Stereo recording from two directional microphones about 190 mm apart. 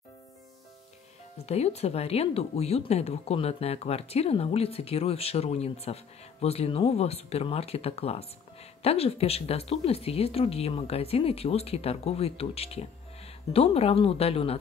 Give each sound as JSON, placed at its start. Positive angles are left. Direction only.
{"t": 1.4, "sound": "speech", "side_deg": 35}